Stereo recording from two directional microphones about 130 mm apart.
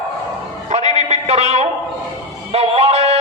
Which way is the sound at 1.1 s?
55° right (ahead or behind).